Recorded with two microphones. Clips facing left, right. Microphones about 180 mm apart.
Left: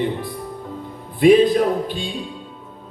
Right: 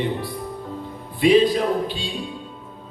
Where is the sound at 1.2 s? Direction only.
50° left (ahead or behind).